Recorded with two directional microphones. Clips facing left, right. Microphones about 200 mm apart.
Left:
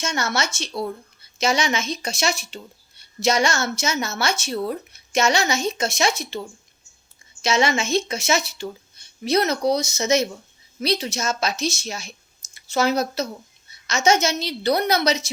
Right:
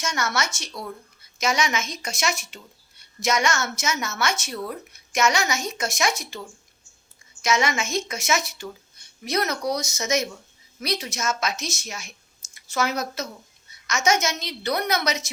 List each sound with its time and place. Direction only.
0.0 s a woman's voice: 25° left (ahead or behind)
7.4 s a woman's voice: 30° left (ahead or behind)